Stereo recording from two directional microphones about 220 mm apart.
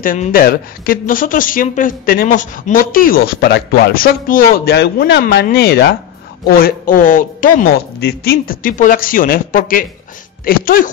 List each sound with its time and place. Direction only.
0.0 s a woman's voice: 40° left (ahead or behind)